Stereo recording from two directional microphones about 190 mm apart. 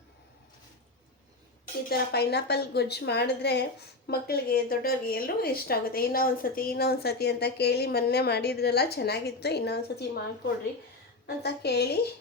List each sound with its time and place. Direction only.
1.9 s a woman's voice: 60° left (ahead or behind)